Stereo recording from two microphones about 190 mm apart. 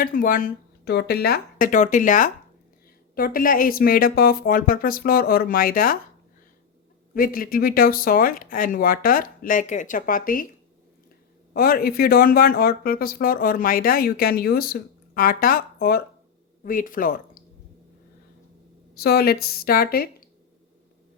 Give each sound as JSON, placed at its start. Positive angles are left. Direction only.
{"t": 0.0, "sound": "speech", "side_deg": 45}
{"t": 7.1, "sound": "speech", "side_deg": 50}
{"t": 11.5, "sound": "speech", "side_deg": 50}
{"t": 18.9, "sound": "speech", "side_deg": 55}